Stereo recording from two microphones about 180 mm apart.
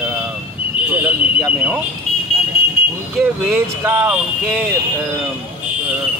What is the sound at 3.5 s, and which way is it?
Speech, 10° right (ahead or behind).